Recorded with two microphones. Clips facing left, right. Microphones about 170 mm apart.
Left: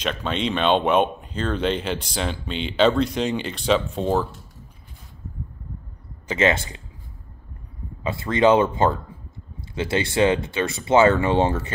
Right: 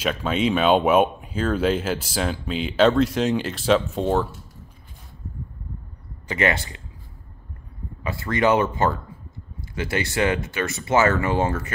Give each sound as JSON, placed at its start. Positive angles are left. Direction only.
{"t": 0.0, "sound": "speech", "side_deg": -5}
{"t": 6.2, "sound": "speech", "side_deg": 20}
{"t": 8.0, "sound": "speech", "side_deg": 25}